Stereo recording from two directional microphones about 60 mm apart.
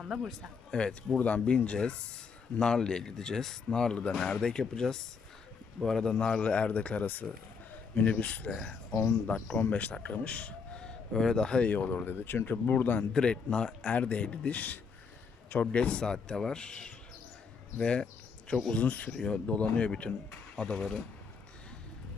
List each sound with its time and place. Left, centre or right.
0.0 s speech: centre
0.7 s speech: centre
8.4 s speech: centre
11.1 s speech: centre
11.7 s speech: left
13.1 s speech: centre
18.7 s speech: left